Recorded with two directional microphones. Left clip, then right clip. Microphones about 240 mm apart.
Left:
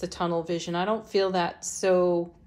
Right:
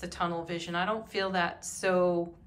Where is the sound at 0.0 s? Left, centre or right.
Centre.